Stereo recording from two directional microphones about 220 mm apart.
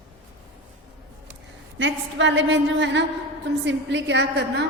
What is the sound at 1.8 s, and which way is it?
A woman's voice, 55° right (ahead or behind).